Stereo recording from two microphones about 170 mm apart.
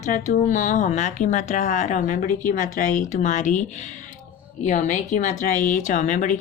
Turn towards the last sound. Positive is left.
turn(degrees=45)  # may be behind; listen again after turning